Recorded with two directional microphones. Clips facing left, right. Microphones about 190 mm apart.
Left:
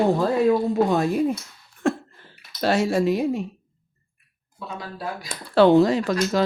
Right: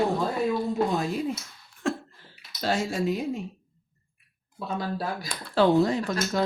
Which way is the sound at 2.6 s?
70° left (ahead or behind).